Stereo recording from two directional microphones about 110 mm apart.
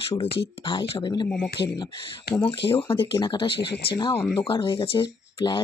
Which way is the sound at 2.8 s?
55° left (ahead or behind).